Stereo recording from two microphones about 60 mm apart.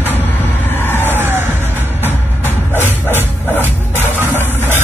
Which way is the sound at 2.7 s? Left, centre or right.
Left.